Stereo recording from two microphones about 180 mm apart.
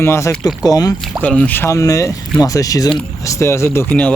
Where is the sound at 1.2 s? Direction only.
10° left (ahead or behind).